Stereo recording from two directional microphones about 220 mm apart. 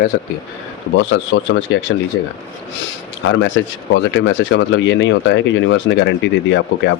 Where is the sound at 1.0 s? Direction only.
55° left (ahead or behind).